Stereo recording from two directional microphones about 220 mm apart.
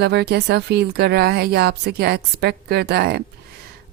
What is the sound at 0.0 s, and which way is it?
A woman's voice, 50° right (ahead or behind).